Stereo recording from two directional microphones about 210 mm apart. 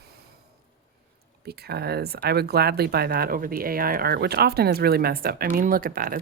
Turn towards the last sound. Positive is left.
turn(degrees=-40)  # may be behind; listen again after turning